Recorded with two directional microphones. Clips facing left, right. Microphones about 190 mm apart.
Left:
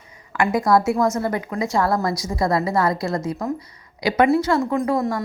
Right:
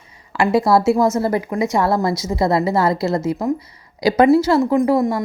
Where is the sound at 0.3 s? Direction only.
30° right (ahead or behind).